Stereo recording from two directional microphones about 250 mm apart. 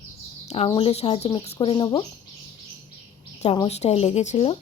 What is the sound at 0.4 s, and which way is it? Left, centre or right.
A woman's voice, left.